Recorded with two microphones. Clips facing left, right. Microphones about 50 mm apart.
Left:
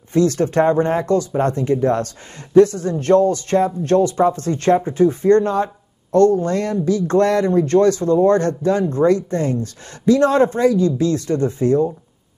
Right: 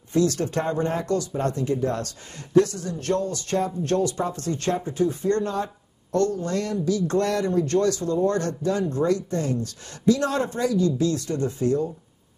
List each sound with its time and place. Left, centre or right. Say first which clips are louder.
0.1 s speech: left 6 dB; left